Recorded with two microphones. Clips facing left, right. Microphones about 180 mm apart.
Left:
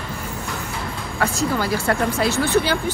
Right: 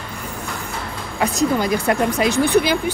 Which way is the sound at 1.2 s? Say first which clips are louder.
Right 3 dB; 15° right (ahead or behind).